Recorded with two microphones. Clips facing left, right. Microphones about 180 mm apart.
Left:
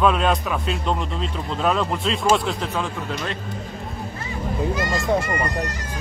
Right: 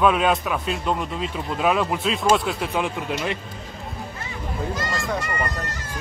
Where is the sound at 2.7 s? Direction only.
15° right (ahead or behind).